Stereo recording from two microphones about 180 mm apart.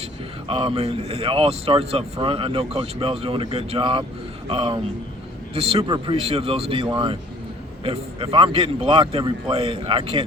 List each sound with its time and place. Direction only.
0.0 s speech: 30° right (ahead or behind)